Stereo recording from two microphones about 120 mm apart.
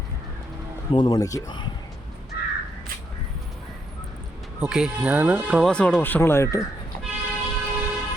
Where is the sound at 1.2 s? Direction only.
30° left (ahead or behind).